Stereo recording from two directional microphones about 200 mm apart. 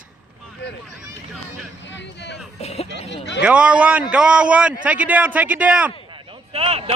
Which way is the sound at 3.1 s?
60° left (ahead or behind).